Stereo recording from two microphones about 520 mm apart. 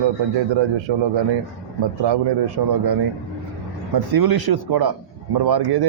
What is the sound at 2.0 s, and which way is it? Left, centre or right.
Speech, right.